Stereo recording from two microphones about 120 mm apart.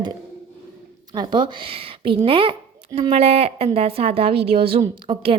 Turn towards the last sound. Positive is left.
turn(degrees=-45)  # may be behind; listen again after turning